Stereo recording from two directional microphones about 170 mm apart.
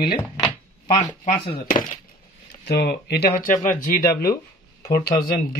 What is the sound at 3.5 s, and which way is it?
Speech, 50° left (ahead or behind).